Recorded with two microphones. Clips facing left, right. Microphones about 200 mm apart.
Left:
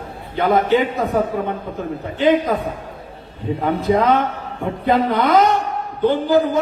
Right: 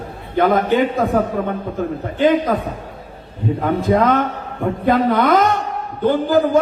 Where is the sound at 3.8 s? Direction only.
50° right (ahead or behind).